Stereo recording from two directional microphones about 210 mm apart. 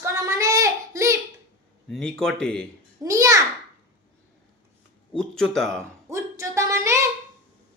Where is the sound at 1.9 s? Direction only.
5° left (ahead or behind).